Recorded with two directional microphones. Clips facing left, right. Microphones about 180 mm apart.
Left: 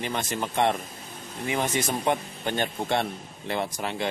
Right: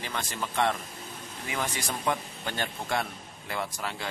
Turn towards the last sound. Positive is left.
turn(degrees=20)  # may be behind; listen again after turning